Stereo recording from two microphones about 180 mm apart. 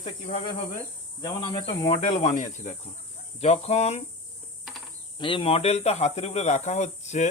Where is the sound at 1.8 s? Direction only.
40° left (ahead or behind).